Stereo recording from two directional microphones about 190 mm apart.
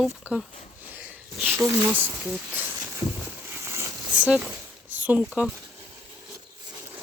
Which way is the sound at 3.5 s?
15° right (ahead or behind).